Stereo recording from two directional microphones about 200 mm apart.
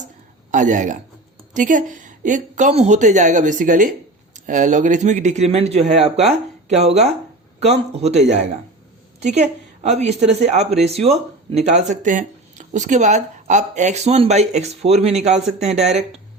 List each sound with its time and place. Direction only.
0.5 s a woman's voice: 40° right (ahead or behind)
9.2 s a woman's voice: 35° right (ahead or behind)